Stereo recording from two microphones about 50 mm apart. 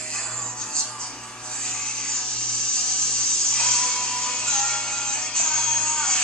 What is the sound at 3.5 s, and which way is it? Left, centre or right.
Music, centre.